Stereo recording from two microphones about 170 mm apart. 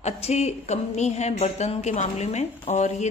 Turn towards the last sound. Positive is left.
turn(degrees=45)  # may be behind; listen again after turning